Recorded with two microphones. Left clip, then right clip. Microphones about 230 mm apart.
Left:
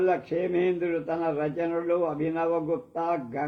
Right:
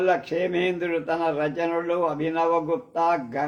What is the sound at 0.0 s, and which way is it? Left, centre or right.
Speech, right.